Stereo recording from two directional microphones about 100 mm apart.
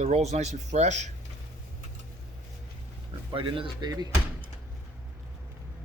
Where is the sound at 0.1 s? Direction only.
90° right.